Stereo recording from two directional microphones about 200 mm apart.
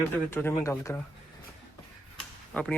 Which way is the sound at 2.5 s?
5° left (ahead or behind).